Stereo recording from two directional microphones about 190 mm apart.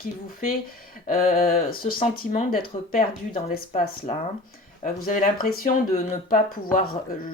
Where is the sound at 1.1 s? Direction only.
45° left (ahead or behind).